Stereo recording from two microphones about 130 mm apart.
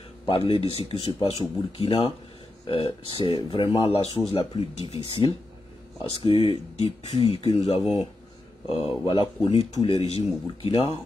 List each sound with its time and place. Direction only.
0.3 s speech: 45° left (ahead or behind)